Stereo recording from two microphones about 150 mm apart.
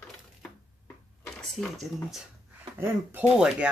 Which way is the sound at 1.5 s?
Centre (ahead or behind).